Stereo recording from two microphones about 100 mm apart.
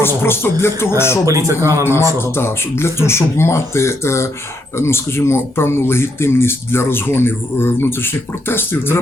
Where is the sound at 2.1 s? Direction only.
25° left (ahead or behind).